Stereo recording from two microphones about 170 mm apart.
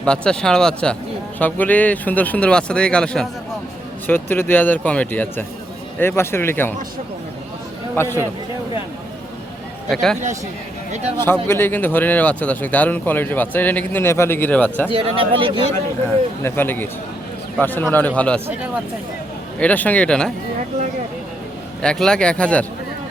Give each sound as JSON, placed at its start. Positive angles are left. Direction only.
{"t": 0.0, "sound": "speech", "side_deg": 5}
{"t": 7.9, "sound": "speech", "side_deg": 15}
{"t": 9.9, "sound": "speech", "side_deg": 0}
{"t": 11.2, "sound": "speech", "side_deg": 15}
{"t": 14.8, "sound": "speech", "side_deg": -30}
{"t": 16.4, "sound": "speech", "side_deg": 10}
{"t": 19.5, "sound": "speech", "side_deg": 10}
{"t": 21.8, "sound": "speech", "side_deg": 5}